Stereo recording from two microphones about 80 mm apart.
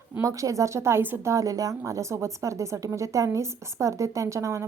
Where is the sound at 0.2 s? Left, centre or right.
Right.